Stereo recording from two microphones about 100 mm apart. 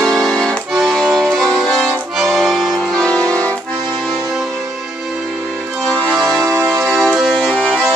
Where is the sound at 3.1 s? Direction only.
10° left (ahead or behind).